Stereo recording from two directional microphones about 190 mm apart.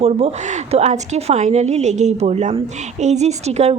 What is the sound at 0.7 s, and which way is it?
A woman's voice, 35° right (ahead or behind).